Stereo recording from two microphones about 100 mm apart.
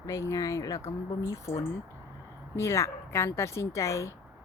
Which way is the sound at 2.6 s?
30° left (ahead or behind).